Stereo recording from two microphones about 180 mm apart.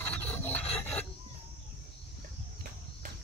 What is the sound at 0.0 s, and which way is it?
Filing, 10° left (ahead or behind).